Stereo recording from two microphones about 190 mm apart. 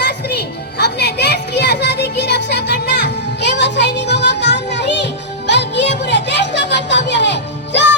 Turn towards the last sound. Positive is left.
turn(degrees=65)  # may be behind; listen again after turning